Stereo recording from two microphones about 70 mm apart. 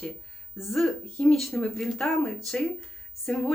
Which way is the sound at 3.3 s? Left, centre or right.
Centre.